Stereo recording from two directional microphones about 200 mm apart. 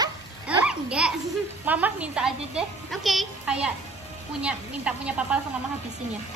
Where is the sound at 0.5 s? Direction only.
5° right (ahead or behind).